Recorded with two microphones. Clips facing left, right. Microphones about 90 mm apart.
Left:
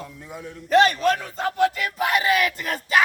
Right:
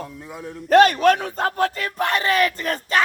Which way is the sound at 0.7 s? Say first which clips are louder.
Right 4 dB; 50° right (ahead or behind).